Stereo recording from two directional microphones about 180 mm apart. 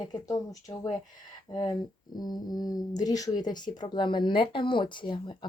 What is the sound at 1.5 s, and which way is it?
Speech, 25° left (ahead or behind).